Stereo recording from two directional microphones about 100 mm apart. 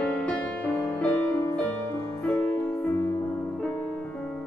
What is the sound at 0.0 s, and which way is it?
Music, 10° left (ahead or behind).